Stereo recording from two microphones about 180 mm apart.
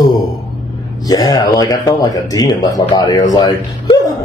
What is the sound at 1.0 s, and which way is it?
A man's voice, 20° left (ahead or behind).